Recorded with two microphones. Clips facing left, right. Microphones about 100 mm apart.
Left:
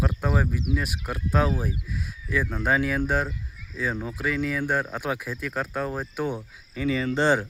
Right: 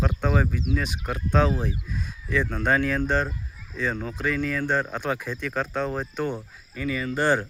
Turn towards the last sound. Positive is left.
turn(degrees=20)  # may be behind; listen again after turning